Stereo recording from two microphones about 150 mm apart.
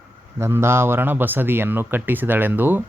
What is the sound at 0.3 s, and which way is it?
Speech, 15° right (ahead or behind).